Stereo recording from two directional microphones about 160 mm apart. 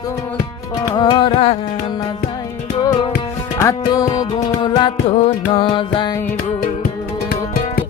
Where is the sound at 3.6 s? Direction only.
20° left (ahead or behind).